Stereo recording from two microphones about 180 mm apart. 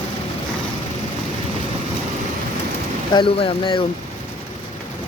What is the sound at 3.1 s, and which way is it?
Speech, 30° left (ahead or behind).